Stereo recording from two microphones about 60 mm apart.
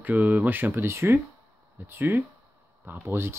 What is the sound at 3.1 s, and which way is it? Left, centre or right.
Speech, right.